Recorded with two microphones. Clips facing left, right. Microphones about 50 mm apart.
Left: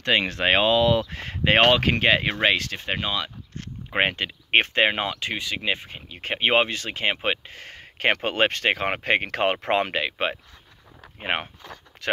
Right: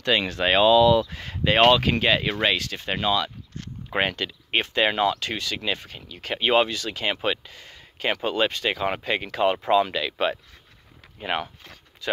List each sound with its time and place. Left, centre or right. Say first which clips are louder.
0.0 s speech: left 1 dB; left
2.9 s speech: right 4 dB; centre
4.5 s speech: left 4 dB; left
4.8 s speech: right 2 dB; left
7.5 s speech: left 4 dB; left
10.0 s speech: right 1 dB; left
12.0 s speech: left 1 dB; left